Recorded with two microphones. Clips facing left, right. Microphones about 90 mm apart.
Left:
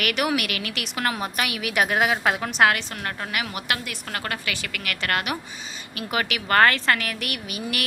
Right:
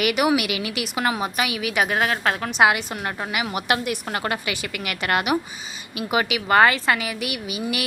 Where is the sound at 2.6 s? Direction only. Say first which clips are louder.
Right 2 dB; 15° right (ahead or behind).